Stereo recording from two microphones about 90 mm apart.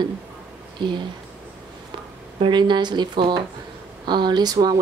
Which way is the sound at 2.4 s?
60° right (ahead or behind).